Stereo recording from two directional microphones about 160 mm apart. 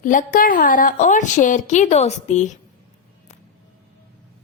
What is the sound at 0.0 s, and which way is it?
A woman's voice, 55° left (ahead or behind).